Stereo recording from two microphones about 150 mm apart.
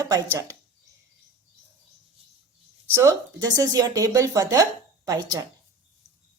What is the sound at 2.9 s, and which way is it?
A woman's voice, 25° right (ahead or behind).